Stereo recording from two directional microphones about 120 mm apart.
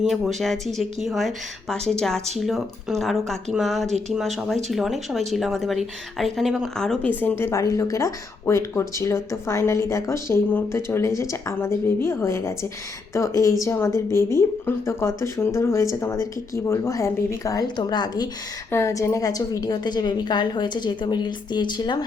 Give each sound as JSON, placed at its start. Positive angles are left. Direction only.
{"t": 0.0, "sound": "speech", "side_deg": 0}
{"t": 18.7, "sound": "a woman's voice", "side_deg": 25}